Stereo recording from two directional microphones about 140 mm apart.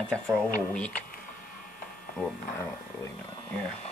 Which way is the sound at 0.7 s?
10° left (ahead or behind).